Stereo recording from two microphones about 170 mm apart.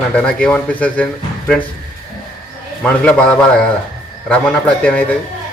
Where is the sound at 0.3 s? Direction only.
5° left (ahead or behind).